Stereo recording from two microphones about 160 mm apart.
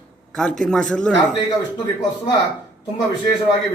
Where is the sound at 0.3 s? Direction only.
5° left (ahead or behind).